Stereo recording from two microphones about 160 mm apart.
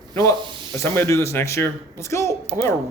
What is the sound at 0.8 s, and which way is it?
Speech, 15° left (ahead or behind).